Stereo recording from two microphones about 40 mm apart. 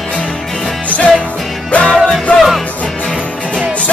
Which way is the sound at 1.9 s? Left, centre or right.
Centre.